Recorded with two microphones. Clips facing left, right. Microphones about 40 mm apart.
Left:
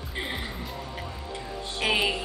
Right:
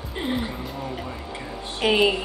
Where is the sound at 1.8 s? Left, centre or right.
Centre.